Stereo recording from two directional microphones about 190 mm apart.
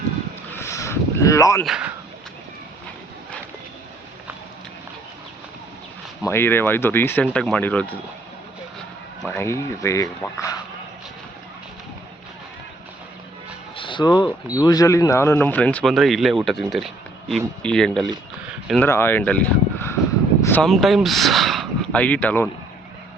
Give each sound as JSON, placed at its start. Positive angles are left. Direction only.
{"t": 0.5, "sound": "a sound", "side_deg": 15}
{"t": 1.6, "sound": "speech", "side_deg": -5}
{"t": 6.2, "sound": "speech", "side_deg": 10}
{"t": 9.2, "sound": "speech", "side_deg": 10}
{"t": 13.7, "sound": "a sound", "side_deg": 25}
{"t": 14.5, "sound": "speech", "side_deg": 20}